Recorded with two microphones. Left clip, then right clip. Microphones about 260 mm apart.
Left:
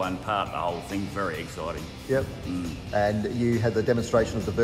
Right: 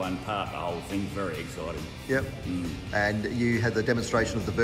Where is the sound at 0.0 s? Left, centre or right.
Centre.